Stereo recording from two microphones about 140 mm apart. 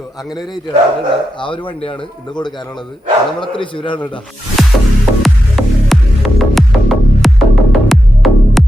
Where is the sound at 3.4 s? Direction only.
35° left (ahead or behind).